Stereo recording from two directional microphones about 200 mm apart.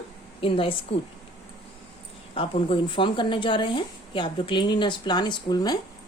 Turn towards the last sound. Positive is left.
turn(degrees=20)  # may be behind; listen again after turning